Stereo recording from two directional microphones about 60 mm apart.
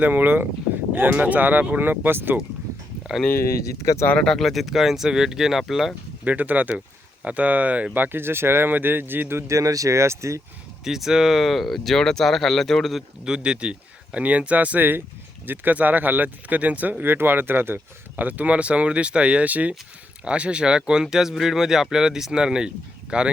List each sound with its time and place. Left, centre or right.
0.0 s speech: right
3.6 s speech: left
4.2 s speech: centre
6.2 s speech: right
7.9 s speech: right
9.5 s speech: right
10.8 s speech: centre
13.2 s speech: centre